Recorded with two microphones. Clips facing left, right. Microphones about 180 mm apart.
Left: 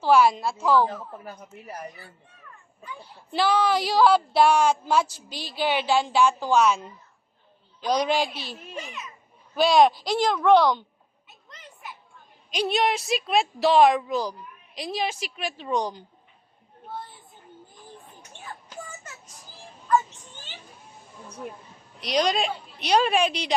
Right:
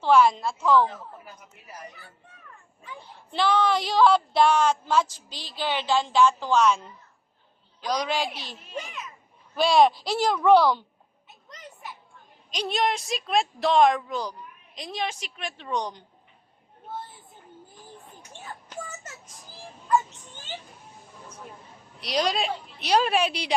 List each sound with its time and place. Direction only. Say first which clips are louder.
0.0 s a woman's voice: even; 5° left (ahead or behind)
3.3 s a woman's voice: left 1 dB; 5° left (ahead or behind)
7.9 s a woman's voice: left 4 dB; 20° left (ahead or behind)
9.6 s a woman's voice: left 1 dB; centre (ahead or behind)
12.5 s a woman's voice: left 2 dB; 5° left (ahead or behind)
22.0 s a woman's voice: left 2 dB; centre (ahead or behind)